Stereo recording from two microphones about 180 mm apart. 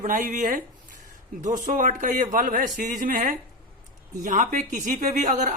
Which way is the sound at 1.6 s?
45° right (ahead or behind).